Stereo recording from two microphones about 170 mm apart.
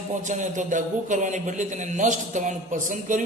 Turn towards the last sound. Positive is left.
turn(degrees=-50)  # may be behind; listen again after turning